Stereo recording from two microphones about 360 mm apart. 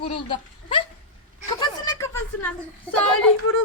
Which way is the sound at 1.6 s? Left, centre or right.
Centre.